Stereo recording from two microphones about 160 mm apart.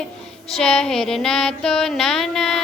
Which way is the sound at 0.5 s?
5° left (ahead or behind).